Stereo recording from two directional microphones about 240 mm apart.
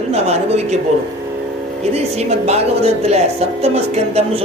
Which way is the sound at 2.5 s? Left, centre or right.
Right.